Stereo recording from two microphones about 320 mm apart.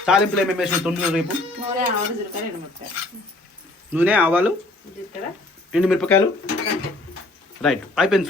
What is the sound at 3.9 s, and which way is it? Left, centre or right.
Speech, centre.